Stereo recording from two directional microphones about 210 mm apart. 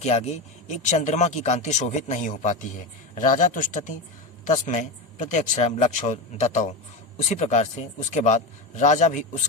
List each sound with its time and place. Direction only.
0.0 s speech: 30° left (ahead or behind)